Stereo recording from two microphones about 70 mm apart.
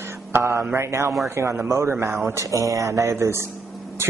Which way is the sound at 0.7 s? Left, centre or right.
Right.